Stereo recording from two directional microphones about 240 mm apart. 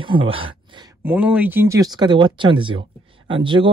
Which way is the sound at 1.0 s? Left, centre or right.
Centre.